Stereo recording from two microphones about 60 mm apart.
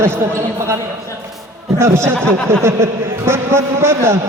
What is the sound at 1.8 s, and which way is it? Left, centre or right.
A man's voice, right.